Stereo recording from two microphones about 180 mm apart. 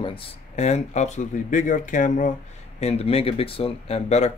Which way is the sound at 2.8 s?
35° left (ahead or behind).